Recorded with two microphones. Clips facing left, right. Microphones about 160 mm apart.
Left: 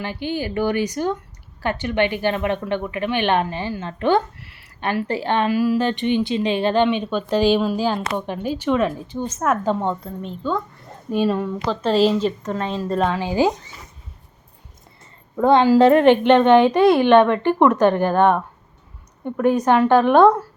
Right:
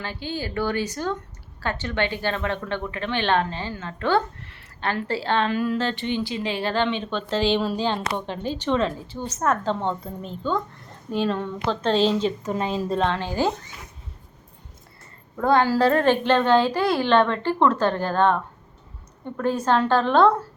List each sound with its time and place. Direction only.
0.0 s a woman's voice: 15° left (ahead or behind); by 13.0 s 5° right (ahead or behind)
13.0 s a woman's voice: 10° left (ahead or behind)
15.4 s a woman's voice: 20° left (ahead or behind)